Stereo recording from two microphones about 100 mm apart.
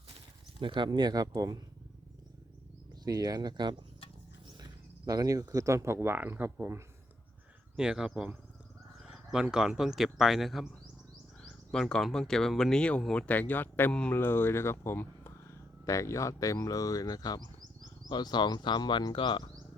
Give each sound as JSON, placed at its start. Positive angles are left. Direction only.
{"t": 0.6, "sound": "speech", "side_deg": -50}
{"t": 3.0, "sound": "speech", "side_deg": -40}
{"t": 7.8, "sound": "speech", "side_deg": -5}